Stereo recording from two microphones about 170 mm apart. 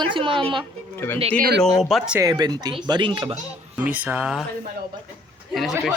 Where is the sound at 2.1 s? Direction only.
25° right (ahead or behind).